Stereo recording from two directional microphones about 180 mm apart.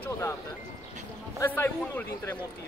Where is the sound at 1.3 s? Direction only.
15° left (ahead or behind).